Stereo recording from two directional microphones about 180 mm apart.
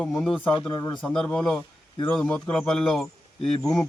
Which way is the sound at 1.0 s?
5° left (ahead or behind).